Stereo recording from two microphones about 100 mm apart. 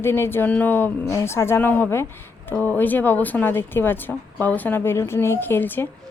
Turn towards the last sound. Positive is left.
turn(degrees=20)  # may be behind; listen again after turning